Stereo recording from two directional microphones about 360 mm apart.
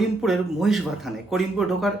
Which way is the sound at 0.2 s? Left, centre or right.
Centre.